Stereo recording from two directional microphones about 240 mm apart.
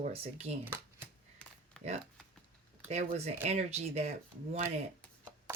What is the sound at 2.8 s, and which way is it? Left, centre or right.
Speech, right.